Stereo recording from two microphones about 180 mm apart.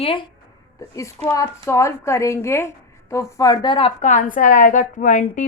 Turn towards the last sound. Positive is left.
turn(degrees=45)  # may be behind; listen again after turning